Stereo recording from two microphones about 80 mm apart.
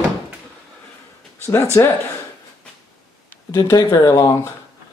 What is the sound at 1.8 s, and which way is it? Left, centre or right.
Speech, left.